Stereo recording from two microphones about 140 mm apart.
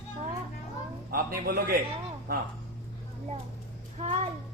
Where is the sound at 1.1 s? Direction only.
90° right.